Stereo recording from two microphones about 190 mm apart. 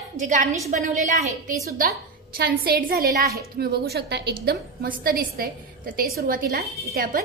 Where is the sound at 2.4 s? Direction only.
55° right (ahead or behind).